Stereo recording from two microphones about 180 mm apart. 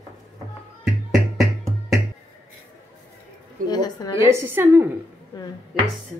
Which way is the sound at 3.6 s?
20° left (ahead or behind).